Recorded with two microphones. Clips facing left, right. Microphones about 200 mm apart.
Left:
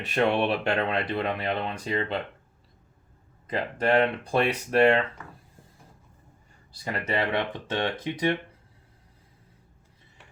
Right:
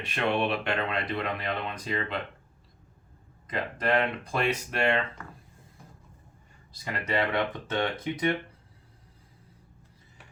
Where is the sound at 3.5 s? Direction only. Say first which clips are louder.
Left 3 dB; 30° left (ahead or behind).